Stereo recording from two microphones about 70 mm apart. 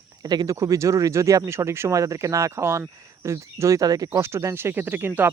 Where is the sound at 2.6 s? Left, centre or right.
Right.